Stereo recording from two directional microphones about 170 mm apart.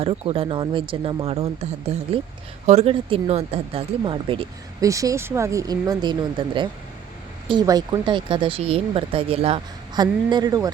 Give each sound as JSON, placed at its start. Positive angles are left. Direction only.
{"t": 0.0, "sound": "speech", "side_deg": -35}
{"t": 4.9, "sound": "speech", "side_deg": -20}